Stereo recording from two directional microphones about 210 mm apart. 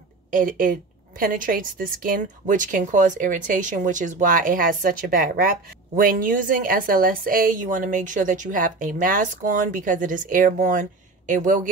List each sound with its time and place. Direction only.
0.3 s a woman's voice: 40° right (ahead or behind)